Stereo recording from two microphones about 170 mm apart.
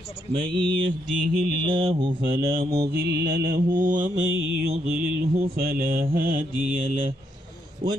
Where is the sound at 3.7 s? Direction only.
55° right (ahead or behind).